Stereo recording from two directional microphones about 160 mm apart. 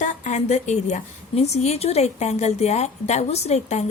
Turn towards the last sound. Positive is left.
turn(degrees=45)  # may be behind; listen again after turning